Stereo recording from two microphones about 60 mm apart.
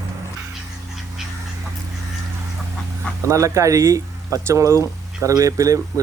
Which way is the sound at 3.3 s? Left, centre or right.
Right.